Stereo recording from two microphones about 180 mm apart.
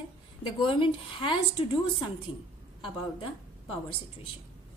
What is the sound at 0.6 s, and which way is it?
Speech, 30° left (ahead or behind).